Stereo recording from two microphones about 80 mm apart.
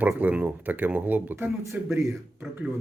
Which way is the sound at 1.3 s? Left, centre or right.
Right.